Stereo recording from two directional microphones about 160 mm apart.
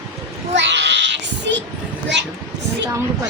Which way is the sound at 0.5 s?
90° right.